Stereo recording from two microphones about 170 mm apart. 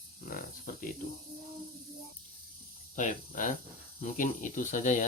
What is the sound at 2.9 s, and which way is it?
Speech, 50° left (ahead or behind).